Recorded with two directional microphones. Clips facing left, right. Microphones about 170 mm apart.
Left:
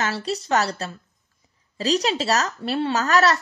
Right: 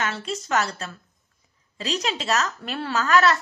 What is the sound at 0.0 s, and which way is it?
A woman's voice, 35° left (ahead or behind).